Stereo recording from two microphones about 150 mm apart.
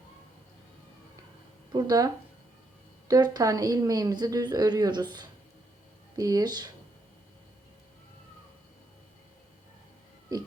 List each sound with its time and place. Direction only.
1.7 s a woman's voice: 25° right (ahead or behind)